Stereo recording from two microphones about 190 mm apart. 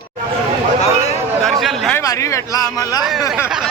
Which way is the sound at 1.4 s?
Centre (ahead or behind).